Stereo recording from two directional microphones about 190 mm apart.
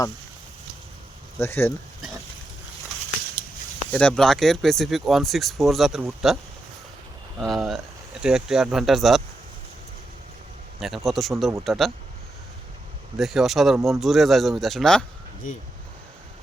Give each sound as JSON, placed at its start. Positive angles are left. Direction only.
{"t": 1.4, "sound": "speech", "side_deg": 10}
{"t": 3.9, "sound": "speech", "side_deg": 5}
{"t": 7.3, "sound": "speech", "side_deg": 0}
{"t": 10.8, "sound": "speech", "side_deg": 0}
{"t": 13.1, "sound": "speech", "side_deg": 0}